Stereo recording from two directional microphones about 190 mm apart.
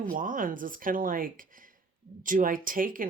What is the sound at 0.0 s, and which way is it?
Speech, 45° right (ahead or behind).